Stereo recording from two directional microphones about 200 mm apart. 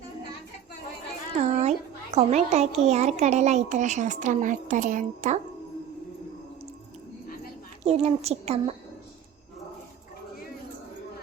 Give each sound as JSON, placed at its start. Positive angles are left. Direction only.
{"t": 1.5, "sound": "a sound", "side_deg": -35}
{"t": 2.1, "sound": "a child's voice", "side_deg": -35}
{"t": 7.9, "sound": "a child's voice", "side_deg": -30}